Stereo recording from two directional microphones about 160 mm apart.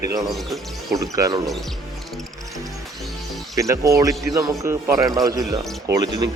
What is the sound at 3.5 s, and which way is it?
Speech, 20° right (ahead or behind).